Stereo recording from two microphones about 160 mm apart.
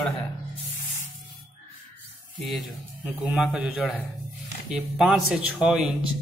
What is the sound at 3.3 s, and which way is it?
Speech, 5° right (ahead or behind).